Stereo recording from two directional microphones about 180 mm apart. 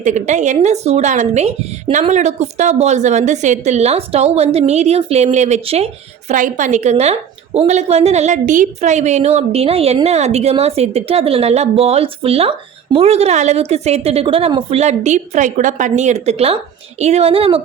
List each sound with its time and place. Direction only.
0.0 s speech: 40° right (ahead or behind)